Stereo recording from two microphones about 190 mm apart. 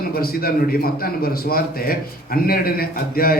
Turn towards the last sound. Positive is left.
turn(degrees=50)  # may be behind; listen again after turning